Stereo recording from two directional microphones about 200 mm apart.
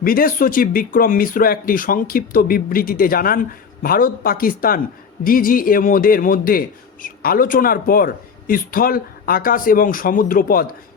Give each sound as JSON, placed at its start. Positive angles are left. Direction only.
{"t": 0.0, "sound": "a man's voice", "side_deg": 45}